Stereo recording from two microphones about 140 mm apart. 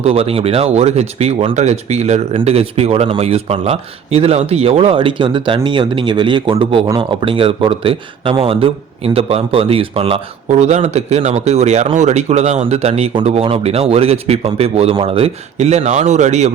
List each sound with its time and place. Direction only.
0.0 s speech: 45° right (ahead or behind)
10.6 s speech: 55° right (ahead or behind)